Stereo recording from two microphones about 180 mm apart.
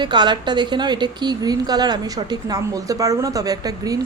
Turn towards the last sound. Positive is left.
turn(degrees=-20)  # may be behind; listen again after turning